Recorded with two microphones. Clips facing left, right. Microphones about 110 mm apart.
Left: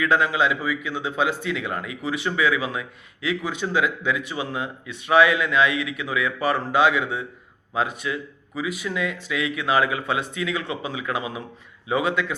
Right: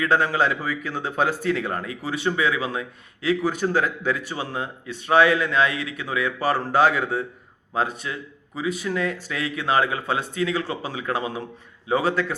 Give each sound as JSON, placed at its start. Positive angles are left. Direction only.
{"t": 0.0, "sound": "speech", "side_deg": -40}